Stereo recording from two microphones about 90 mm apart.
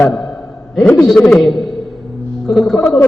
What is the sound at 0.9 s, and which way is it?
Speech, 5° left (ahead or behind).